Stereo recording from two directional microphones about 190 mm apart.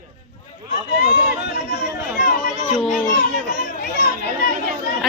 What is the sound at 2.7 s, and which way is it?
Children playing, centre (ahead or behind).